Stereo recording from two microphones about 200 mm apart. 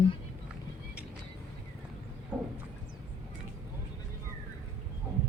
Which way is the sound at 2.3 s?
5° right (ahead or behind).